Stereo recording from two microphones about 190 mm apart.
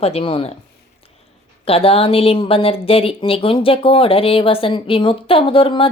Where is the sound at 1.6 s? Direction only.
30° left (ahead or behind).